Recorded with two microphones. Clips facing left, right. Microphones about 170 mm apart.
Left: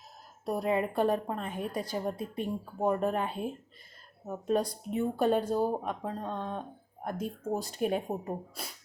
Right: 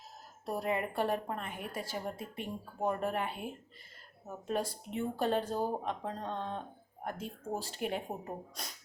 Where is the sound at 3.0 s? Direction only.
20° left (ahead or behind).